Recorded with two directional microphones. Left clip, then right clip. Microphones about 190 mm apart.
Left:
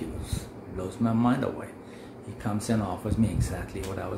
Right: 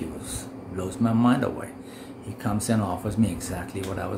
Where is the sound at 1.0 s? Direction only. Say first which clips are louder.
Right 3 dB; 20° right (ahead or behind).